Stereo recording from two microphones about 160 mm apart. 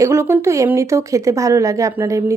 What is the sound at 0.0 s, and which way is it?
Speech, 15° right (ahead or behind).